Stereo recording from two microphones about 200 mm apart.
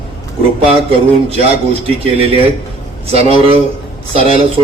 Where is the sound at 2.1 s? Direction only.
30° right (ahead or behind).